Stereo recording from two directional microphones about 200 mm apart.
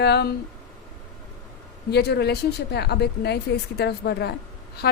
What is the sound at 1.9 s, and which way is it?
A woman's voice, 55° left (ahead or behind).